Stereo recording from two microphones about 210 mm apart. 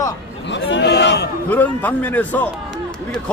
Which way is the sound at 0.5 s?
55° left (ahead or behind).